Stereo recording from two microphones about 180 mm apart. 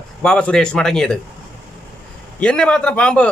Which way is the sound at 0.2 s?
5° left (ahead or behind).